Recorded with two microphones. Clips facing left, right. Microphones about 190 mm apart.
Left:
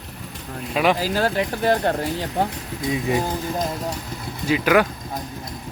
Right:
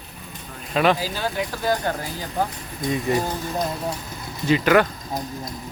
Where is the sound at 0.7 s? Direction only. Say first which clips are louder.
Even; 5° left (ahead or behind).